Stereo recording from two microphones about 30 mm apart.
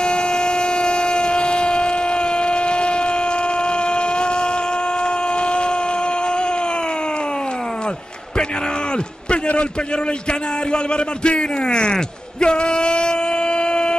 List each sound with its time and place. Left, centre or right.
0.0 s train: left
5.0 s vehicle: left
6.2 s a sound: left
10.7 s speech: left